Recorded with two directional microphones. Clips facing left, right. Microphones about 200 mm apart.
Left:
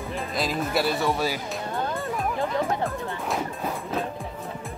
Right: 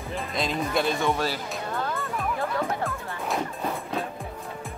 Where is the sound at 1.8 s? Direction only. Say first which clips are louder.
Left 2 dB; 20° left (ahead or behind).